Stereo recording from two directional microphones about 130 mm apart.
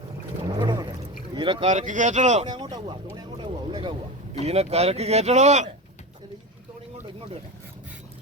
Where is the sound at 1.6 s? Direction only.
70° right (ahead or behind).